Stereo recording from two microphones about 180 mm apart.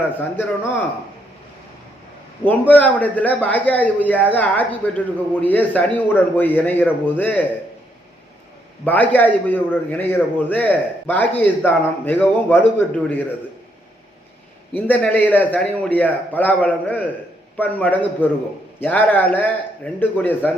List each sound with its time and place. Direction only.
2.4 s a man's voice: 10° left (ahead or behind)
8.8 s a man's voice: 10° left (ahead or behind)
14.7 s a man's voice: 10° left (ahead or behind)